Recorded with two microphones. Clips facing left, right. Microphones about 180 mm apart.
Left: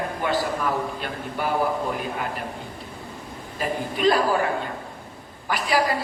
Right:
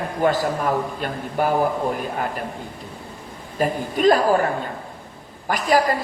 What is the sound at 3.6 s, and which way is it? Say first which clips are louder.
Speech: right 4 dB; 45° right (ahead or behind).